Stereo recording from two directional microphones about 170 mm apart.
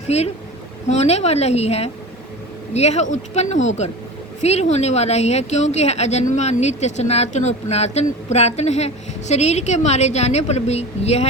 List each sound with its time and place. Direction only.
0.1 s speech: 40° left (ahead or behind)